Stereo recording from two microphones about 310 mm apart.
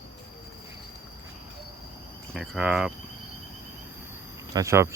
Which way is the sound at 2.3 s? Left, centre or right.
Centre.